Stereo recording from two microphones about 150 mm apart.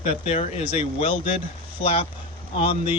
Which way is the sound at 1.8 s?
40° left (ahead or behind).